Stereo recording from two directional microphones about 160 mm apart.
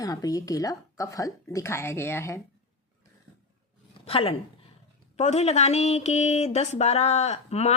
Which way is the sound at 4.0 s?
35° left (ahead or behind).